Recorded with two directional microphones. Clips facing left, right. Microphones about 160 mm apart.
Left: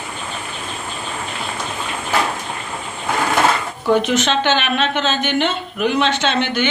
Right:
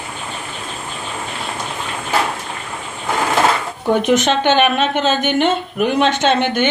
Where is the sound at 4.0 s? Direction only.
55° right (ahead or behind).